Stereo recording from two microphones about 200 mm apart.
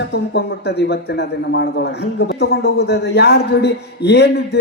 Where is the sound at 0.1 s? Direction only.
55° left (ahead or behind).